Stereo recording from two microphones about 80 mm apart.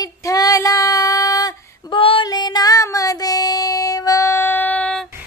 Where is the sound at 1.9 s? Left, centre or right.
Left; by 4.9 s centre.